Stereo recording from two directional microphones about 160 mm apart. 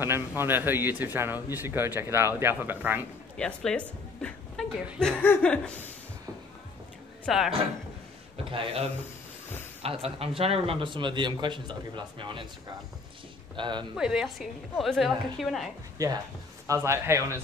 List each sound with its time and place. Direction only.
0.0 s speech: 15° right (ahead or behind)
3.3 s speech: 5° left (ahead or behind)
7.2 s a woman's voice: centre (ahead or behind)
8.5 s speech: 35° right (ahead or behind)
13.6 s a man's voice: 30° right (ahead or behind)
13.9 s a woman's voice: 5° right (ahead or behind)
16.0 s a man's voice: 20° right (ahead or behind)